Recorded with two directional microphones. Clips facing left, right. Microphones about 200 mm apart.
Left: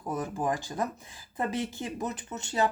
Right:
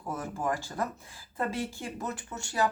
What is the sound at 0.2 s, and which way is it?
Speech, 15° left (ahead or behind).